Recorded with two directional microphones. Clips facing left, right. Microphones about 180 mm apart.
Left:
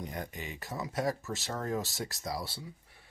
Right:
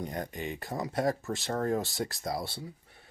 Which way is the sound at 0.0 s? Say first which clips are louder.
Right 4 dB; 35° right (ahead or behind).